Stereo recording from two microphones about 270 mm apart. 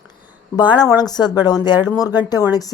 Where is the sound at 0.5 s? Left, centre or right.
Centre.